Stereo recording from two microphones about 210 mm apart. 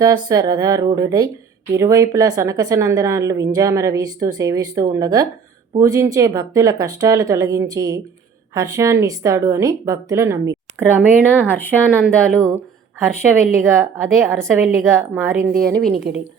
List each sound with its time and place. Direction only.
0.0 s a woman's voice: 15° right (ahead or behind)
11.3 s speech: 10° left (ahead or behind)
13.0 s a woman's voice: 10° right (ahead or behind)
15.8 s speech: centre (ahead or behind)